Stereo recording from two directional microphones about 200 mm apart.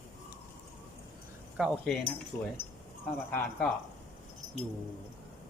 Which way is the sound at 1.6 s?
5° right (ahead or behind).